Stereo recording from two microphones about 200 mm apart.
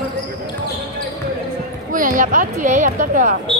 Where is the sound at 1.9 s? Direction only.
40° right (ahead or behind).